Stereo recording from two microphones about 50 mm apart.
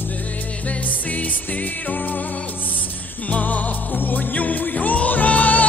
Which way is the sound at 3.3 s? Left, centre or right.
Left.